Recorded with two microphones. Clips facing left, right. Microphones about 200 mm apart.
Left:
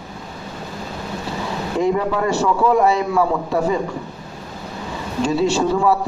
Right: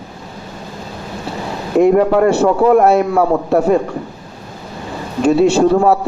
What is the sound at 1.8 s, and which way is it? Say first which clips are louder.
Speech: right 9 dB; 60° right (ahead or behind).